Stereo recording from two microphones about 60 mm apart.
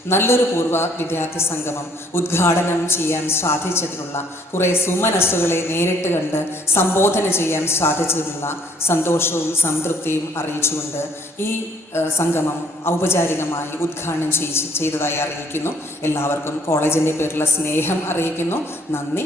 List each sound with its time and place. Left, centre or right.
0.1 s a man's voice: left
11.9 s a man's voice: left